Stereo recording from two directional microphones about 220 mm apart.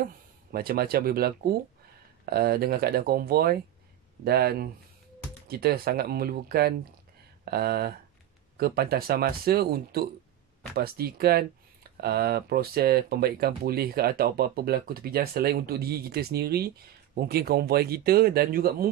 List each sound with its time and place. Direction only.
0.0 s speech: 45° right (ahead or behind)